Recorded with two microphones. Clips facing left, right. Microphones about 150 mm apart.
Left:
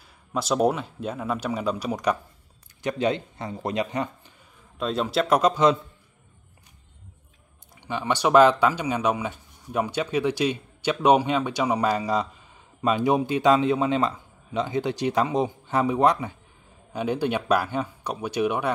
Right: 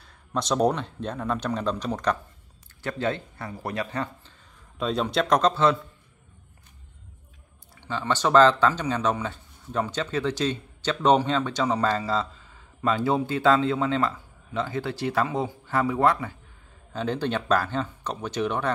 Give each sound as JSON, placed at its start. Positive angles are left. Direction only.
{"t": 0.0, "sound": "speech", "side_deg": 5}
{"t": 4.7, "sound": "speech", "side_deg": 0}
{"t": 7.7, "sound": "speech", "side_deg": 15}